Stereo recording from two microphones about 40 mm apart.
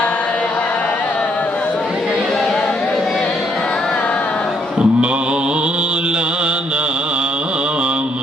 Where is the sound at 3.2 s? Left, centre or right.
Left.